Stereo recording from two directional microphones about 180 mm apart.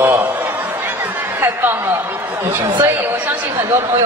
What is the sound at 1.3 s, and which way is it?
A man's voice, 15° right (ahead or behind).